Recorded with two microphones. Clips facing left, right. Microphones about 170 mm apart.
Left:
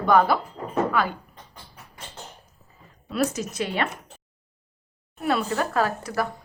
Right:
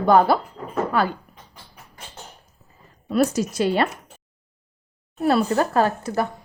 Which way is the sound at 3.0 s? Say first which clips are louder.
Right 5 dB; 40° right (ahead or behind).